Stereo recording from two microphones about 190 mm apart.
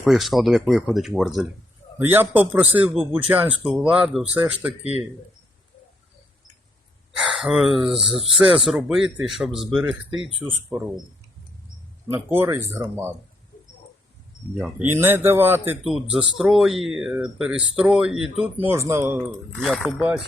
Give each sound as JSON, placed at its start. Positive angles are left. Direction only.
{"t": 0.0, "sound": "a man's voice", "side_deg": 0}
{"t": 4.8, "sound": "speech", "side_deg": 35}
{"t": 7.2, "sound": "a man's voice", "side_deg": 0}
{"t": 12.0, "sound": "speech", "side_deg": -10}
{"t": 14.6, "sound": "a man's voice", "side_deg": -10}